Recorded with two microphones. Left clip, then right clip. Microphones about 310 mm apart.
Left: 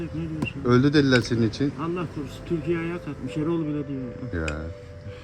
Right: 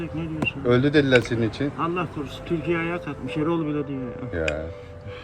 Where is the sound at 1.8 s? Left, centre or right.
Centre.